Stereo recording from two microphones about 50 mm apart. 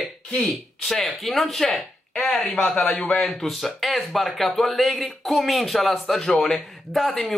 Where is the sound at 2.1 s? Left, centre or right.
Left.